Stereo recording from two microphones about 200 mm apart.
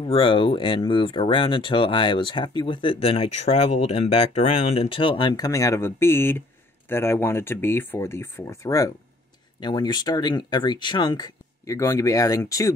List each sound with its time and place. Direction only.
0.0 s speech: 25° left (ahead or behind)